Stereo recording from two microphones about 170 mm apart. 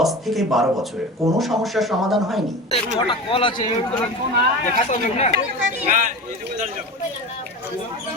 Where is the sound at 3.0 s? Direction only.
30° left (ahead or behind).